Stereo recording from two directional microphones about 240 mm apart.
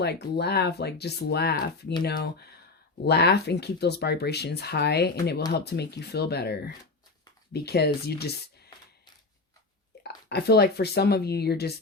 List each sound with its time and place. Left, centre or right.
0.0 s speech: left
10.0 s speech: left